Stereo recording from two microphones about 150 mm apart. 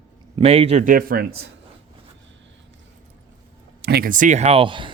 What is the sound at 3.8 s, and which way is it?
Speech, 85° right.